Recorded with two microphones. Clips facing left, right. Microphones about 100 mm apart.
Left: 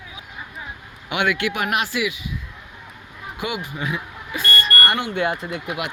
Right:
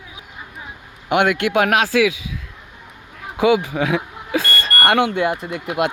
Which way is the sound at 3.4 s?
90° right.